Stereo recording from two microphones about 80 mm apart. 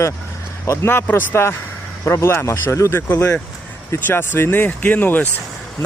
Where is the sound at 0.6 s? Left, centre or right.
Left.